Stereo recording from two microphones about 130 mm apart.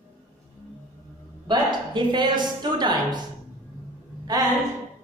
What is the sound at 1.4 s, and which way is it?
A woman's voice, 35° right (ahead or behind).